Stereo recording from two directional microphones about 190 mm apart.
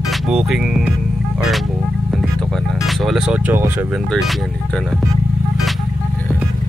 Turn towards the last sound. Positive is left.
turn(degrees=0)  # may be behind; listen again after turning